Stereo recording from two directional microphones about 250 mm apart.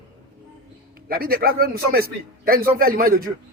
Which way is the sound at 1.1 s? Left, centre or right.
Right.